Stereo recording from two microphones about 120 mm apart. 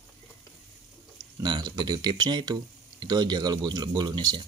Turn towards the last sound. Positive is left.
turn(degrees=-35)  # may be behind; listen again after turning